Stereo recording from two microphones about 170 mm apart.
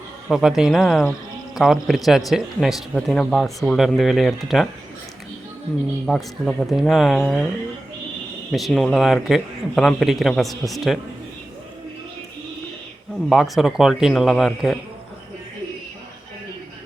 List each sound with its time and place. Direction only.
0.3 s speech: 5° right (ahead or behind)
6.1 s speech: centre (ahead or behind)
8.5 s speech: centre (ahead or behind)
13.3 s speech: centre (ahead or behind)